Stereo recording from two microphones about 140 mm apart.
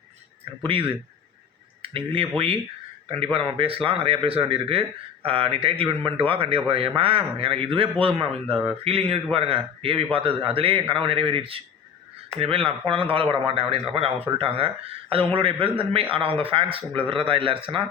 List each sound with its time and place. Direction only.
0.6 s a man's voice: 40° right (ahead or behind)
3.3 s a man's voice: 40° right (ahead or behind)